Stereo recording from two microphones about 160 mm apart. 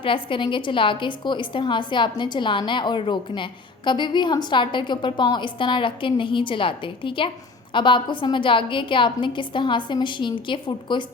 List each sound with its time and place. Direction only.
0.0 s a woman's voice: 30° left (ahead or behind)